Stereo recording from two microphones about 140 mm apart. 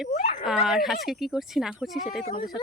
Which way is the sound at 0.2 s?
55° left (ahead or behind).